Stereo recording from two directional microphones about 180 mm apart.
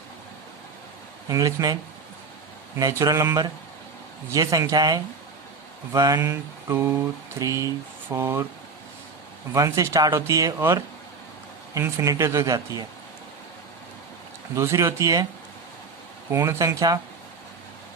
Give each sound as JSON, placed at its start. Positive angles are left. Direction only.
{"t": 1.3, "sound": "speech", "side_deg": -20}
{"t": 3.0, "sound": "speech", "side_deg": -20}
{"t": 5.9, "sound": "mantra", "side_deg": -20}
{"t": 9.5, "sound": "mantra", "side_deg": -15}
{"t": 14.5, "sound": "mantra", "side_deg": -15}
{"t": 16.3, "sound": "mantra", "side_deg": -15}